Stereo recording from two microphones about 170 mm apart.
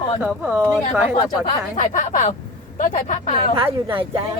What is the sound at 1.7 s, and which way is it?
Speech, 50° left (ahead or behind).